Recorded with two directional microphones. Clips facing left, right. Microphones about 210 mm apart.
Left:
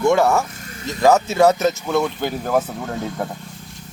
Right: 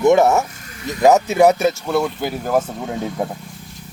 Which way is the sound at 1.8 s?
Centre (ahead or behind).